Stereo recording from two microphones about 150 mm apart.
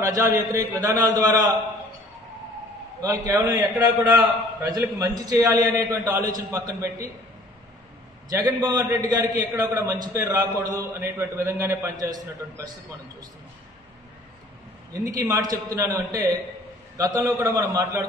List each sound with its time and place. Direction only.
0.0 s a man's voice: 20° right (ahead or behind)
3.0 s a man's voice: 20° right (ahead or behind)
8.3 s a man's voice: 25° right (ahead or behind)
14.9 s a man's voice: 20° right (ahead or behind)